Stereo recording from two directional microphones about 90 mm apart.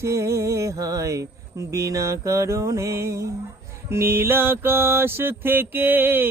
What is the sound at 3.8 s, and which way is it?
Mantra, 25° right (ahead or behind).